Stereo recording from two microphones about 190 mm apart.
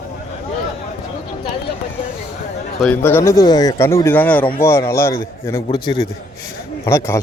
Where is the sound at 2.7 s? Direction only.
5° left (ahead or behind).